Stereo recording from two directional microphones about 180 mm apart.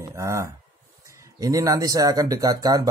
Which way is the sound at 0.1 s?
15° right (ahead or behind).